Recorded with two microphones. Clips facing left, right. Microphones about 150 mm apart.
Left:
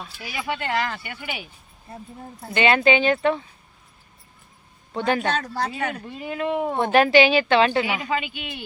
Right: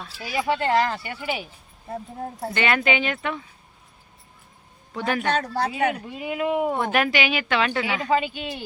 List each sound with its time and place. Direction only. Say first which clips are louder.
0.2 s speech: right 5 dB; 35° right (ahead or behind)
2.5 s speech: left 5 dB; 20° left (ahead or behind)
4.9 s a woman's voice: left 2 dB; 25° left (ahead or behind)
5.5 s speech: right 3 dB; 60° right (ahead or behind)
5.9 s speech: right 2 dB; 10° right (ahead or behind)
6.7 s a woman's voice: left 6 dB; 30° left (ahead or behind)
8.1 s speech: right 4 dB; 40° right (ahead or behind)